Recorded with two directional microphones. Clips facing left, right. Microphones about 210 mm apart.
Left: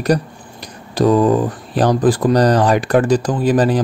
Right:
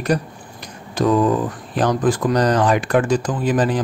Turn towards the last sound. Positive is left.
turn(degrees=35)  # may be behind; listen again after turning